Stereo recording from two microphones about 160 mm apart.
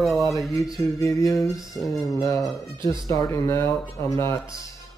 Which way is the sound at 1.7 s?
Centre (ahead or behind).